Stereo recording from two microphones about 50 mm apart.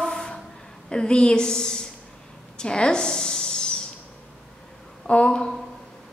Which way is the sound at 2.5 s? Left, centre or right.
Centre.